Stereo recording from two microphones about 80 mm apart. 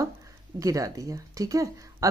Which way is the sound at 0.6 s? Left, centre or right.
Right.